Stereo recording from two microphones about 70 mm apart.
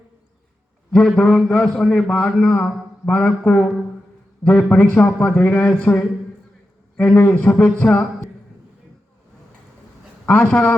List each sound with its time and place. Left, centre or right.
0.9 s a man's voice: centre; by 8.0 s left
10.2 s a man's voice: left